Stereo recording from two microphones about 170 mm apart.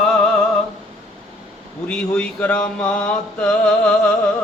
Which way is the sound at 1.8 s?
5° left (ahead or behind).